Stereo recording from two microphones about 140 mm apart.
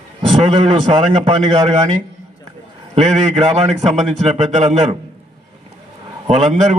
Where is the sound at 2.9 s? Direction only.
50° right (ahead or behind).